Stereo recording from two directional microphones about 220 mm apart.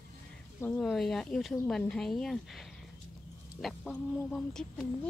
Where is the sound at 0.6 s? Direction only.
5° left (ahead or behind).